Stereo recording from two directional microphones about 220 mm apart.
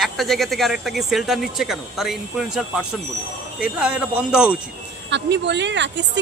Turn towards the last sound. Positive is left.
turn(degrees=-55)  # may be behind; listen again after turning